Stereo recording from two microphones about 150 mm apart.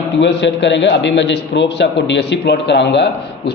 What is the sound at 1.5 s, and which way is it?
Speech, 90° left.